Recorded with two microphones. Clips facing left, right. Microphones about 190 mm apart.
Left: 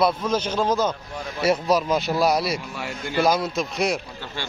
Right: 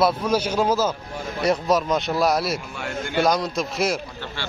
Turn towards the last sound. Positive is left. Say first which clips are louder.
# even
turn(degrees=0)  # may be behind; listen again after turning